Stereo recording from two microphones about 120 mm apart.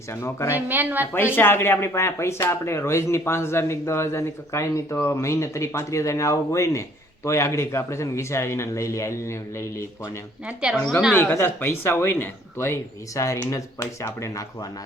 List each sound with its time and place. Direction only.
0.1 s speech: 20° left (ahead or behind)
0.5 s speech: 15° right (ahead or behind)
1.4 s speech: 20° left (ahead or behind)
10.4 s speech: 10° right (ahead or behind)
11.1 s speech: 20° left (ahead or behind)